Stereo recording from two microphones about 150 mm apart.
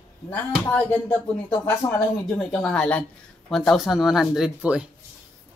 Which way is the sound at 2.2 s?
5° left (ahead or behind).